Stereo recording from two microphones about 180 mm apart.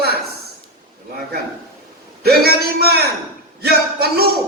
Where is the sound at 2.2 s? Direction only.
60° right (ahead or behind).